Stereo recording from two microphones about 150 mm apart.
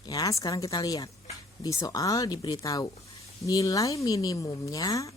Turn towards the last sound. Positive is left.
turn(degrees=20)  # may be behind; listen again after turning